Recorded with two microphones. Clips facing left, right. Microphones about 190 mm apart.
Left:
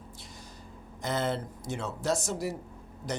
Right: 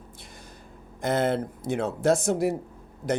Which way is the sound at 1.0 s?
55° right (ahead or behind).